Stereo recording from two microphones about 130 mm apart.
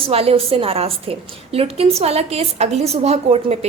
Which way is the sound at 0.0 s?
50° right (ahead or behind).